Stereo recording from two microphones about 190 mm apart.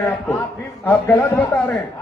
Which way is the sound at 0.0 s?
5° left (ahead or behind).